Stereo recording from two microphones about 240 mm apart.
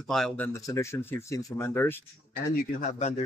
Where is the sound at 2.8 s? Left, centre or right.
Left.